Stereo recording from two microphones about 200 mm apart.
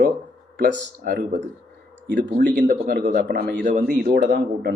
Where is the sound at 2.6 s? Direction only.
50° right (ahead or behind).